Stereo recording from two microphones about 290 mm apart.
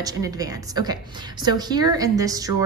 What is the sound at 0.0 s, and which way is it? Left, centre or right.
A woman's voice, centre.